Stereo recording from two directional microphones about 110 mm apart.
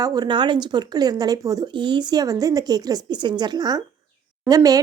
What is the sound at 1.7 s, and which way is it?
Speech, 45° right (ahead or behind).